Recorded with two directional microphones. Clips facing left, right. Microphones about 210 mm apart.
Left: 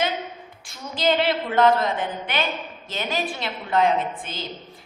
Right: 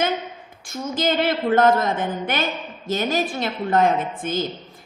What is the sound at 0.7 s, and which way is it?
A woman's voice, 45° right (ahead or behind).